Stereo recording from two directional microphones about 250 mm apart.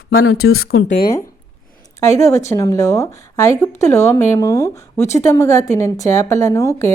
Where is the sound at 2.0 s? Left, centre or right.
Centre.